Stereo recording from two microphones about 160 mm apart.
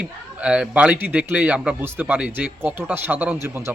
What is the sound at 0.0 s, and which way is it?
A man's voice, 5° right (ahead or behind).